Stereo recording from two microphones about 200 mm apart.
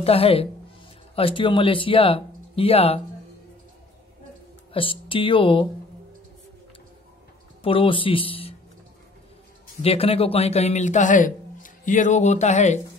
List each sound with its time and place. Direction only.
0.0 s speech: 30° left (ahead or behind)
4.7 s speech: 25° left (ahead or behind)
7.6 s speech: 25° left (ahead or behind)
9.8 s a man's voice: 30° left (ahead or behind)